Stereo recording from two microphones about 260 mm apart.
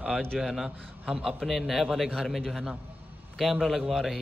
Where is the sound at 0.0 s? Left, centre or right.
Centre.